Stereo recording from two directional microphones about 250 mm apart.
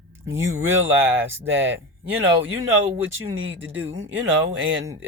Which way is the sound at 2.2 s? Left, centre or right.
Right.